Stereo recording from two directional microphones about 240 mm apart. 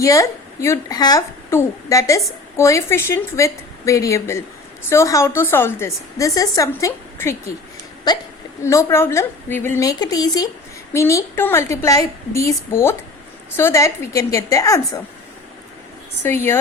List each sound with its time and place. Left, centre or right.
0.0 s a woman's voice: centre
16.2 s a woman's voice: centre